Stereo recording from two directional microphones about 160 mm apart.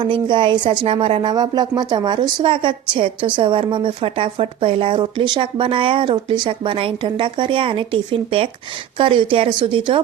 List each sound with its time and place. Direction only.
0.0 s speech: 30° right (ahead or behind)